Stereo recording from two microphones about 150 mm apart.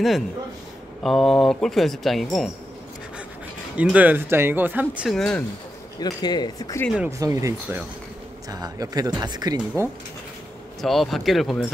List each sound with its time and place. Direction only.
1.0 s speech: centre (ahead or behind)
3.7 s speech: 10° right (ahead or behind)
5.1 s speech: 5° left (ahead or behind)
5.9 s speech: 25° left (ahead or behind)
7.1 s speech: 20° right (ahead or behind)
10.8 s speech: centre (ahead or behind)